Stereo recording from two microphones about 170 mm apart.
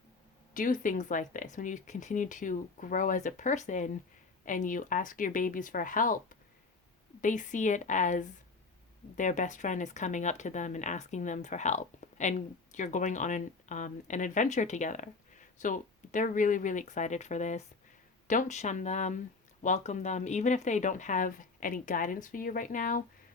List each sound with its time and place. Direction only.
0.5 s speech: 50° left (ahead or behind)